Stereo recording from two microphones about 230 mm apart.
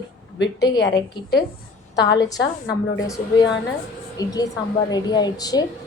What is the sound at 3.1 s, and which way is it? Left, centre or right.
A woman's voice, centre.